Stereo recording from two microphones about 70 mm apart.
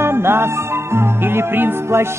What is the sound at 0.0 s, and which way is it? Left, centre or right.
Music, right.